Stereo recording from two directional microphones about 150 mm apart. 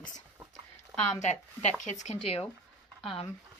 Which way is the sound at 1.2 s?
50° left (ahead or behind).